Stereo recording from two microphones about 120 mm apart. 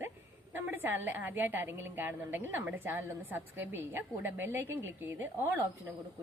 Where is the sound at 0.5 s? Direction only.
15° right (ahead or behind).